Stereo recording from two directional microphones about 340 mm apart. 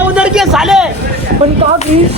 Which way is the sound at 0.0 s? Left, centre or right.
Centre.